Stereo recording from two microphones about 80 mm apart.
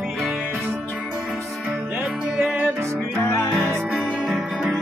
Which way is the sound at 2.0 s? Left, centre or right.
Centre.